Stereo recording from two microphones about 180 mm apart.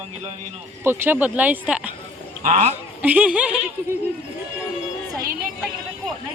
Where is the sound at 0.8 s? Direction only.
10° right (ahead or behind).